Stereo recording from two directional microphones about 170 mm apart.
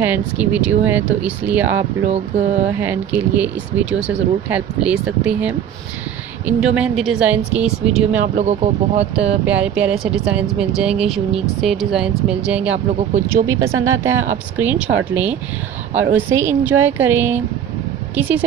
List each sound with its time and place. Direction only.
0.0 s speech: 10° right (ahead or behind)
2.0 s speech: 40° right (ahead or behind)
2.7 s speech: 10° right (ahead or behind)
8.4 s speech: 40° right (ahead or behind)
9.4 s speech: 5° right (ahead or behind)
13.5 s speech: 20° right (ahead or behind)